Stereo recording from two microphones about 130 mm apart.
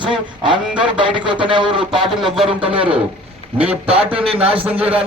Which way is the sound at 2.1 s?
Centre (ahead or behind).